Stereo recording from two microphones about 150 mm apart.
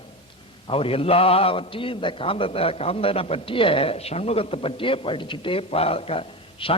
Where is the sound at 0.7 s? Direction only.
40° left (ahead or behind).